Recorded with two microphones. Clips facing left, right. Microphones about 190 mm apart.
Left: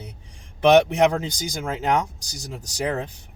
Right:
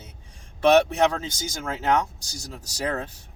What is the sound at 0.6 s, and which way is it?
Speech, 15° left (ahead or behind).